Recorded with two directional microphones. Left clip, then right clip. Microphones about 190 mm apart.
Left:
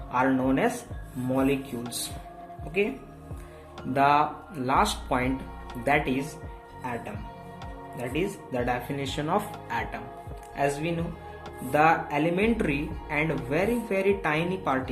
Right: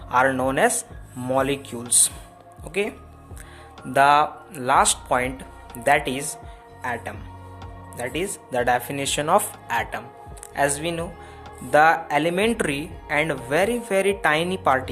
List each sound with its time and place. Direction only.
0.1 s speech: 50° right (ahead or behind)
3.9 s speech: 45° right (ahead or behind)
10.5 s speech: 50° right (ahead or behind)